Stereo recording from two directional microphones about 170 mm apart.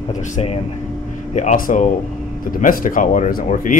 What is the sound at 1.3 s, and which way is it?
Speech, 45° left (ahead or behind).